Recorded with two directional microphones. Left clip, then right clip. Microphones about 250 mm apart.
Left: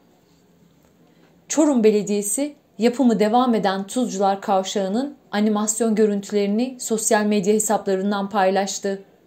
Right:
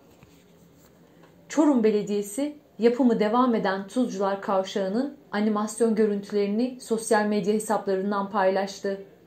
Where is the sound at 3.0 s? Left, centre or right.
Left.